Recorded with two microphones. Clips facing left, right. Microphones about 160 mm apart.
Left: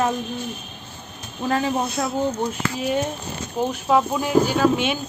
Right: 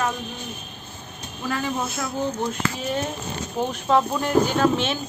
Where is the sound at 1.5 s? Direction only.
20° left (ahead or behind).